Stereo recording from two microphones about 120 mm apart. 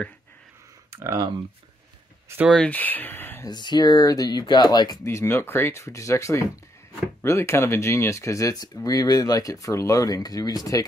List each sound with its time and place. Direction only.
0.8 s a sound: 20° right (ahead or behind)
2.6 s speech: 15° left (ahead or behind)
3.4 s speech: 35° left (ahead or behind)